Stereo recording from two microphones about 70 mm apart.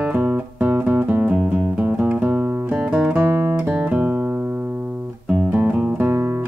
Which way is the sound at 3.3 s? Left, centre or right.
Right.